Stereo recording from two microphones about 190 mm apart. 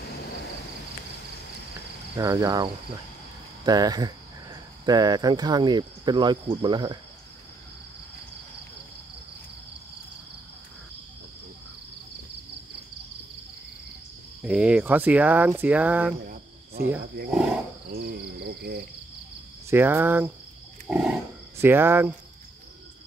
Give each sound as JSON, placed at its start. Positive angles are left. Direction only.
{"t": 2.1, "sound": "speech", "side_deg": -20}
{"t": 14.4, "sound": "speech", "side_deg": -5}
{"t": 17.3, "sound": "speech", "side_deg": -5}
{"t": 17.9, "sound": "cricket", "side_deg": -55}
{"t": 19.7, "sound": "speech", "side_deg": -10}